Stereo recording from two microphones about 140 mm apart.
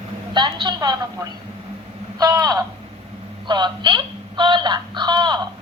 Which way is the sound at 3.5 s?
35° right (ahead or behind).